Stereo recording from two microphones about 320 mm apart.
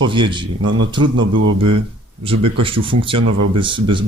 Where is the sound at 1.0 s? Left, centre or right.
Right.